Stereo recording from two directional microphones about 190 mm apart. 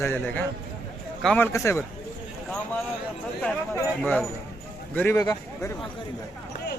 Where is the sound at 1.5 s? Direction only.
15° left (ahead or behind).